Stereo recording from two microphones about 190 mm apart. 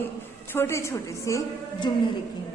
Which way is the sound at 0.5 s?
15° left (ahead or behind).